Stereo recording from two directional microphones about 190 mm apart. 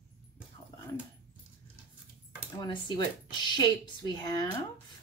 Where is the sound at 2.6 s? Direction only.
20° left (ahead or behind).